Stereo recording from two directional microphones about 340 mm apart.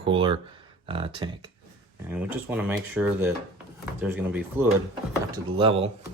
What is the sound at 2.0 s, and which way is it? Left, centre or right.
Speech, centre.